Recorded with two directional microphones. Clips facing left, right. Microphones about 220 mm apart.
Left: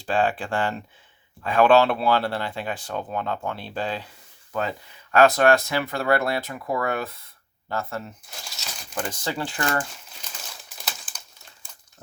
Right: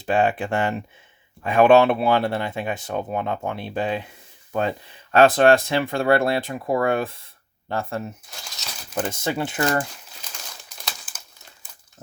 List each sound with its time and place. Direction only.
0.0 s speech: 20° right (ahead or behind)
5.1 s speech: 25° right (ahead or behind)
8.3 s crumpling: centre (ahead or behind)
9.1 s speech: 20° right (ahead or behind)
10.2 s crumpling: 5° left (ahead or behind)